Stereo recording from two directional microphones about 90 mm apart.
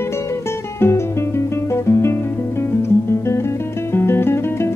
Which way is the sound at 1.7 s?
30° left (ahead or behind).